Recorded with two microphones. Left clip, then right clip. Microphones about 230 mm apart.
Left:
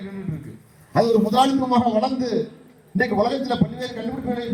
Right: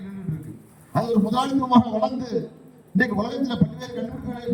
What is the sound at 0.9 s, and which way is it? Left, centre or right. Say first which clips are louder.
A man's voice: left 6 dB; left.